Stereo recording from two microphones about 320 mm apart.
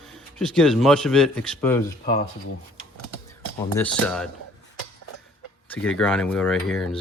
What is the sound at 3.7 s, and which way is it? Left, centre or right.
Speech, centre.